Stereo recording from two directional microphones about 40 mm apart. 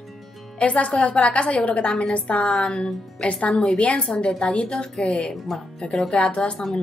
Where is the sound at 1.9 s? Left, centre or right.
Centre.